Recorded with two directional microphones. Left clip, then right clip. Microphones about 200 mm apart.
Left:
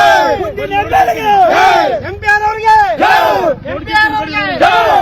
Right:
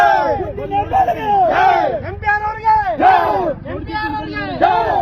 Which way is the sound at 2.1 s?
60° left (ahead or behind).